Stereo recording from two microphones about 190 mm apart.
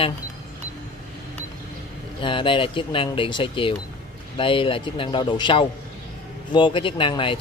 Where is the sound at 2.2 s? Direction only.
25° left (ahead or behind).